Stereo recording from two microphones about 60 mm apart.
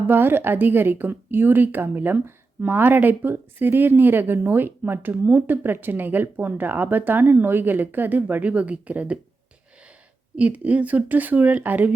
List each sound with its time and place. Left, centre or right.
0.1 s a woman's voice: right
10.3 s speech: right